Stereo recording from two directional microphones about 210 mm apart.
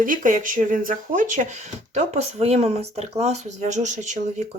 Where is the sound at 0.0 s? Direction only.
40° right (ahead or behind).